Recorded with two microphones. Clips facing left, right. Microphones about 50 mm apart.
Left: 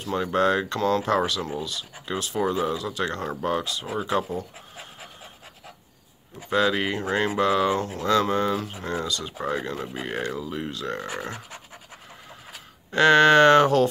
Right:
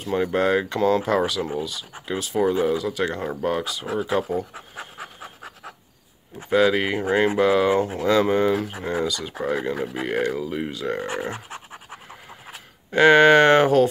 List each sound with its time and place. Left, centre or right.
0.0 s speech: centre
3.9 s speech: right
6.5 s speech: centre
12.9 s speech: centre